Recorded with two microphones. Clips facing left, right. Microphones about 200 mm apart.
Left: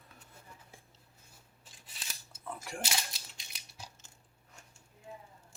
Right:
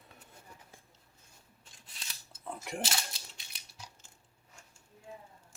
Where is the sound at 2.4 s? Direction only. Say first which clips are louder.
Right 2 dB; 20° right (ahead or behind).